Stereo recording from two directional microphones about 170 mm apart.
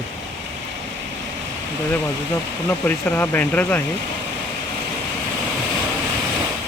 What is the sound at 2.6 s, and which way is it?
Speech, 10° left (ahead or behind).